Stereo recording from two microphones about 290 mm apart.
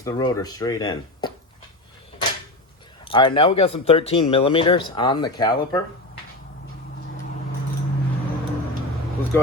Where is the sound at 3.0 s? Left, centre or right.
Centre.